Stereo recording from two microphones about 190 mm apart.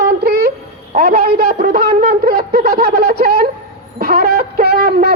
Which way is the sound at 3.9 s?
55° right (ahead or behind).